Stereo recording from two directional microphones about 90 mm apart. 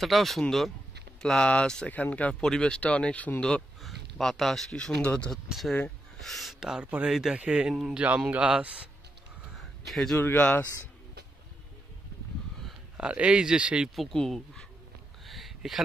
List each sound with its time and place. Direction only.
0.0 s speech: centre (ahead or behind)
3.8 s speech: centre (ahead or behind)
5.5 s speech: centre (ahead or behind)
7.7 s speech: 5° right (ahead or behind)
9.6 s a sound: centre (ahead or behind)
10.1 s speech: 20° left (ahead or behind)
12.9 s speech: 10° right (ahead or behind)
13.9 s speech: 5° left (ahead or behind)
15.2 s a sound: centre (ahead or behind)